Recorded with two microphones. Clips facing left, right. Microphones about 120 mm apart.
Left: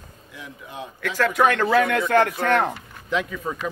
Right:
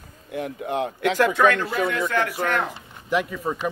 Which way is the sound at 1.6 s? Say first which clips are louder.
Left 5 dB; 60° left (ahead or behind).